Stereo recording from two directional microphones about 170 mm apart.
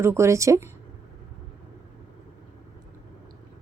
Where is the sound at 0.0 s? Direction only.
15° right (ahead or behind).